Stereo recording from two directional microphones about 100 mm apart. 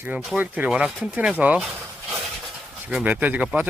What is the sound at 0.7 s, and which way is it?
Speech, 5° right (ahead or behind).